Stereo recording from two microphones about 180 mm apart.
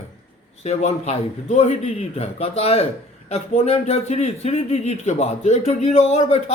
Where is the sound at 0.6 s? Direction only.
40° left (ahead or behind).